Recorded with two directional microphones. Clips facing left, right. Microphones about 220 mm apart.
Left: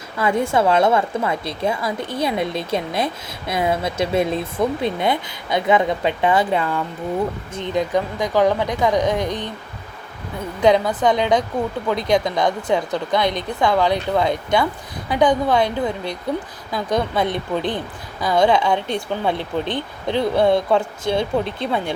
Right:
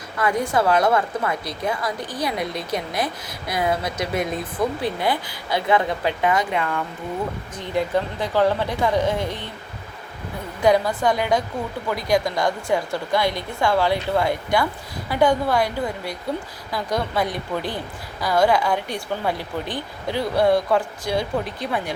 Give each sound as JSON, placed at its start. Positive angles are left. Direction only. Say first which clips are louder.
{"t": 0.2, "sound": "a woman's voice", "louder": "left 3 dB", "side_deg": 25}
{"t": 7.5, "sound": "a woman's voice", "louder": "left 1 dB", "side_deg": 20}
{"t": 10.6, "sound": "a woman's voice", "louder": "left 2 dB", "side_deg": 20}